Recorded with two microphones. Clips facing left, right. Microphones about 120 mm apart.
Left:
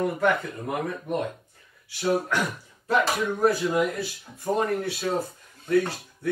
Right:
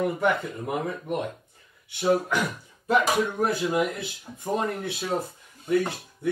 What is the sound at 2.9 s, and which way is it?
Speech, 20° right (ahead or behind).